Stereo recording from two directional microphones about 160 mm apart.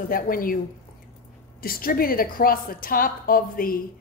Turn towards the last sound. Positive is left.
turn(degrees=65)  # may be behind; listen again after turning